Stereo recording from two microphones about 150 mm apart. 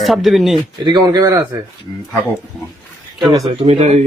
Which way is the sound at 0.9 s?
30° right (ahead or behind).